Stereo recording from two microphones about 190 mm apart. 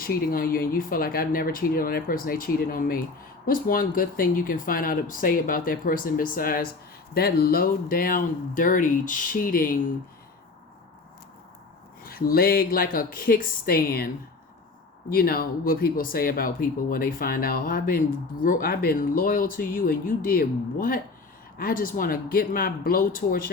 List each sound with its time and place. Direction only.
0.0 s speech: 50° left (ahead or behind)
12.0 s speech: 50° left (ahead or behind)
15.1 s speech: 50° left (ahead or behind)